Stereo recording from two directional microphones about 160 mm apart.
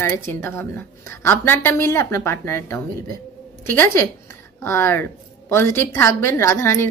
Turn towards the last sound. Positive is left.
turn(degrees=15)  # may be behind; listen again after turning